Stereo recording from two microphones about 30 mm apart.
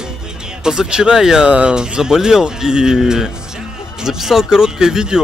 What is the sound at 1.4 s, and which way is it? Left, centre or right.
Speech, right.